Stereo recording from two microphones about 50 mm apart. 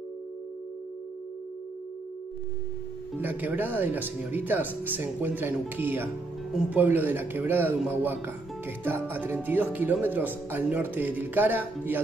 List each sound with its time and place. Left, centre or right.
3.2 s speech: right
6.7 s speech: right